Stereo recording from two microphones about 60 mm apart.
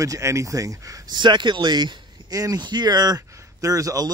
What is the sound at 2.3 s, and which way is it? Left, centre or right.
Speech, right.